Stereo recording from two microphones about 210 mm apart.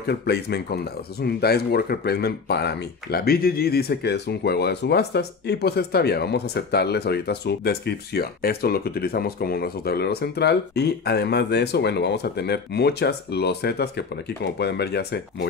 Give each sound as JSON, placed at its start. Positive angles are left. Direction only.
{"t": 0.0, "sound": "speech", "side_deg": 50}